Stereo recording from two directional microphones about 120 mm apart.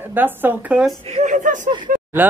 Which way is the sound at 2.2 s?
15° right (ahead or behind).